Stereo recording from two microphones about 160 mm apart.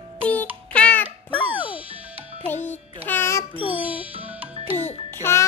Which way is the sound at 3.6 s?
10° right (ahead or behind).